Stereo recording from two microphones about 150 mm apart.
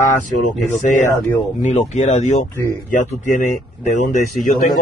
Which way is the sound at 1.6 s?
50° left (ahead or behind).